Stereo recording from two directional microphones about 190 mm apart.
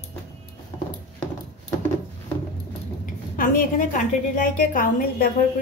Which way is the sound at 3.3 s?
45° left (ahead or behind).